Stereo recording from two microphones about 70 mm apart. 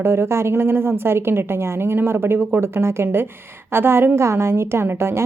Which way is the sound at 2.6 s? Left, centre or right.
Right.